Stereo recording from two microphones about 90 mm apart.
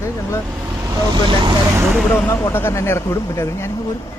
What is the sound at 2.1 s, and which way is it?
Speech, 30° left (ahead or behind).